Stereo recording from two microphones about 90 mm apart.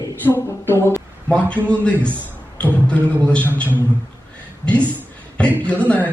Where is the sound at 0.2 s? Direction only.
25° left (ahead or behind).